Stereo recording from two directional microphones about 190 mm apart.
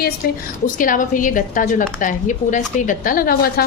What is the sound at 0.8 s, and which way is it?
A woman's voice, 45° left (ahead or behind).